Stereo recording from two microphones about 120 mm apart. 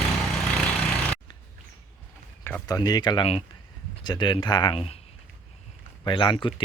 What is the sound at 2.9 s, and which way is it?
Speech, 35° left (ahead or behind).